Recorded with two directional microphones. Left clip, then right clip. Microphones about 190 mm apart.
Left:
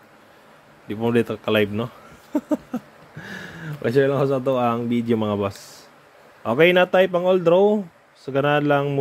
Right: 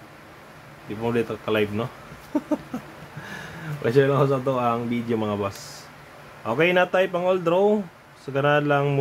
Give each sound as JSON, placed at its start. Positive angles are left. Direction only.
{"t": 0.8, "sound": "speech", "side_deg": 40}
{"t": 2.3, "sound": "a sound", "side_deg": 35}
{"t": 6.4, "sound": "speech", "side_deg": 40}